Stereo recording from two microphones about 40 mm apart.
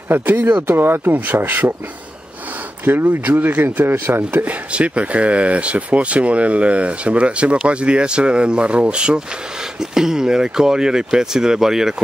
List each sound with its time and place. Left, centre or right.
0.1 s speech: right
0.7 s speech: right
1.1 s speech: right
2.8 s speech: right
3.8 s speech: right
4.7 s speech: right
9.8 s speech: centre